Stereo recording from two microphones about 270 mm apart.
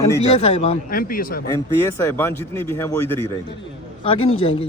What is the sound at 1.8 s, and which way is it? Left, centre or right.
A man's voice, centre.